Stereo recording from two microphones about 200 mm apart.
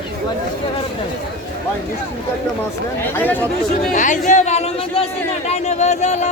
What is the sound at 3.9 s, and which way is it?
Speech, 40° left (ahead or behind).